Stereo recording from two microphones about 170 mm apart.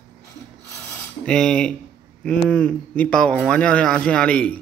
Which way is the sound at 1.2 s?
5° left (ahead or behind).